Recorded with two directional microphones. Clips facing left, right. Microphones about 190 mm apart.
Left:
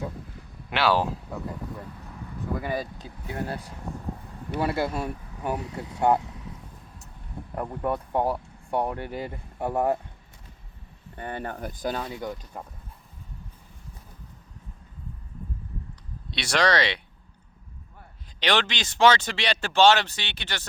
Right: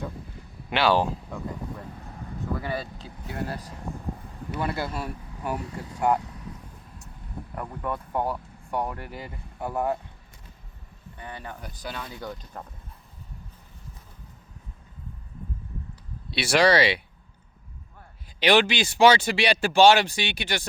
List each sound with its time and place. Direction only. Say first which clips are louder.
0.7 s speech: right 1 dB; centre (ahead or behind)
2.6 s speech: left 2 dB; 15° left (ahead or behind)
4.5 s speech: left 3 dB; 25° left (ahead or behind)
7.5 s speech: left 4 dB; 30° left (ahead or behind)
11.2 s speech: left 6 dB; 50° left (ahead or behind)
12.2 s speech: left 2 dB; 10° left (ahead or behind)
16.3 s speech: right 4 dB; 5° right (ahead or behind)
18.3 s speech: right 5 dB; 10° right (ahead or behind)